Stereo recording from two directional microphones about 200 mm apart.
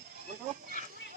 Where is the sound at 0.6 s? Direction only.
45° right (ahead or behind).